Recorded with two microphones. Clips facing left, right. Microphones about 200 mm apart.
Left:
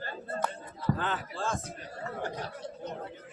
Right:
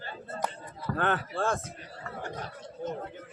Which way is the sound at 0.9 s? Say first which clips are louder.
Right 5 dB; 60° right (ahead or behind).